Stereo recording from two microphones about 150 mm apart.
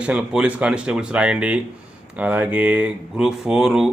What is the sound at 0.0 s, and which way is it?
Speech, 5° right (ahead or behind).